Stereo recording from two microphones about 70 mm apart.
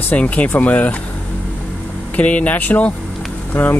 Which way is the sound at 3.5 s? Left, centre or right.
Left.